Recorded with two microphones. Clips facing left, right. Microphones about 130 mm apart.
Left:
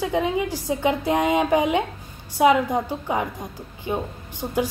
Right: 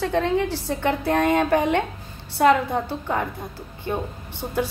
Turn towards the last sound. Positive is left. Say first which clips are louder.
# left 1 dB
turn(degrees=15)  # may be behind; listen again after turning